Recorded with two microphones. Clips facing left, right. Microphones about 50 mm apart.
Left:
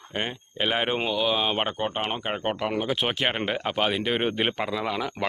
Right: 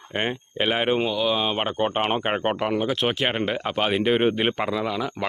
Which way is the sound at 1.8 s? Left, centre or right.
Right.